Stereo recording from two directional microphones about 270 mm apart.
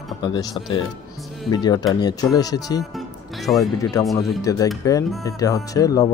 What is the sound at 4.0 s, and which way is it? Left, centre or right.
Speech, centre.